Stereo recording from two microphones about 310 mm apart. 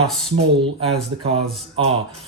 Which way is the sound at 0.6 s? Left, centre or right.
Centre.